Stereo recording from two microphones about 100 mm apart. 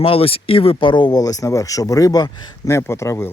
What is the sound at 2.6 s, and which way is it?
Speech, 25° left (ahead or behind).